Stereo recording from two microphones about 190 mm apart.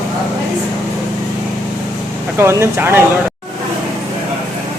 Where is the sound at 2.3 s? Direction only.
15° right (ahead or behind).